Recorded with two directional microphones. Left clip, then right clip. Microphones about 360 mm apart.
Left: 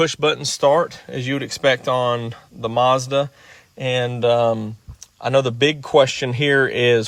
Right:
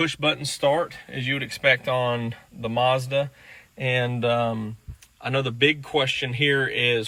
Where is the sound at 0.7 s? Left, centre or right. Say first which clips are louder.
Left 6 dB; left.